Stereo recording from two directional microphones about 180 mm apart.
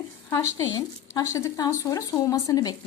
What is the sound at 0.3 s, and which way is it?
A woman's voice, 15° left (ahead or behind).